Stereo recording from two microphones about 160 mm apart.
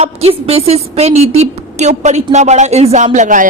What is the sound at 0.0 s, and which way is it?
A woman's voice, 40° right (ahead or behind).